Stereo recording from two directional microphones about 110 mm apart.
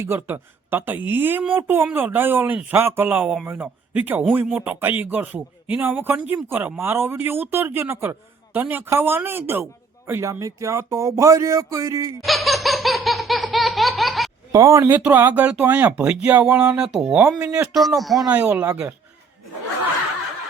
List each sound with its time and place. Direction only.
0.0 s speech: 20° right (ahead or behind)
12.2 s laughter: centre (ahead or behind)
14.5 s speech: 25° right (ahead or behind)
17.7 s speech: centre (ahead or behind)
18.3 s speech: 15° right (ahead or behind)